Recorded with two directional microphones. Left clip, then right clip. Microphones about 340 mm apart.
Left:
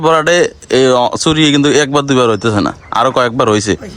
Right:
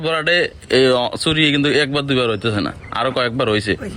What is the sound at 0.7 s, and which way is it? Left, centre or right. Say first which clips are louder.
A man's voice: left 4 dB; centre.